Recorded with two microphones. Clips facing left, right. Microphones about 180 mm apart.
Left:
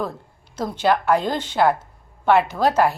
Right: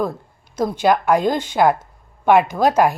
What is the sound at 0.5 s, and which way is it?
A woman's voice, 10° right (ahead or behind).